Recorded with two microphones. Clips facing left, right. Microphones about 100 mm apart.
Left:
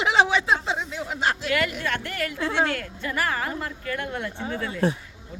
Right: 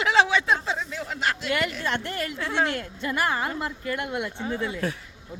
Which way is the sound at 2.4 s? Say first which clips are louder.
Left 3 dB; 20° left (ahead or behind).